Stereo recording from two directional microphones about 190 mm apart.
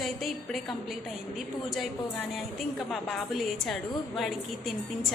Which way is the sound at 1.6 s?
Centre (ahead or behind).